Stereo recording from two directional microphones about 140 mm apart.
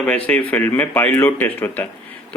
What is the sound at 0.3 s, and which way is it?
Speech, 10° left (ahead or behind).